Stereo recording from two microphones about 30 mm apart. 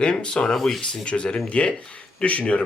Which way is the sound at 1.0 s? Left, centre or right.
Left.